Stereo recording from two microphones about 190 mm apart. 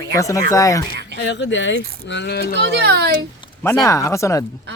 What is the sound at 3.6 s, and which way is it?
Speech, 15° left (ahead or behind).